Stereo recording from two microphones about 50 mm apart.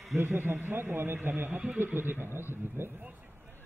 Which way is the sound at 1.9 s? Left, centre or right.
Right.